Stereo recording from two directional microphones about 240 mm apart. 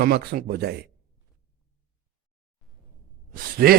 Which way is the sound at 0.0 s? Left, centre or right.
Right.